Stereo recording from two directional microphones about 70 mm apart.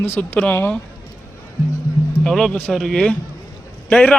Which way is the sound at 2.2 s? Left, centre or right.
Centre.